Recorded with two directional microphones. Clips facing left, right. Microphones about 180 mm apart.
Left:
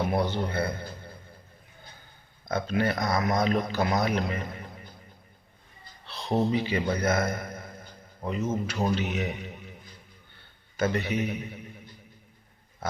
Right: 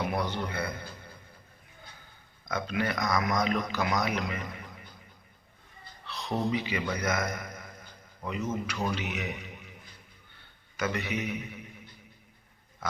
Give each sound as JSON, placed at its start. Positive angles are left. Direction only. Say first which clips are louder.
{"t": 0.0, "sound": "a man's voice", "louder": "left 4 dB", "side_deg": 30}
{"t": 2.5, "sound": "speech", "louder": "left 4 dB", "side_deg": 30}
{"t": 6.1, "sound": "a man's voice", "louder": "left 4 dB", "side_deg": 25}
{"t": 10.8, "sound": "a man's voice", "louder": "left 5 dB", "side_deg": 30}